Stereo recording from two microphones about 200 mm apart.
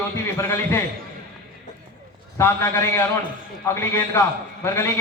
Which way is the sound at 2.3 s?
15° left (ahead or behind).